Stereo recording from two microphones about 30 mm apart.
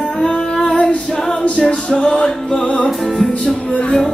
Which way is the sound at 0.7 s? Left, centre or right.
Left.